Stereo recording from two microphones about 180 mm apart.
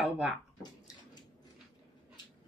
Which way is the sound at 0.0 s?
Centre (ahead or behind).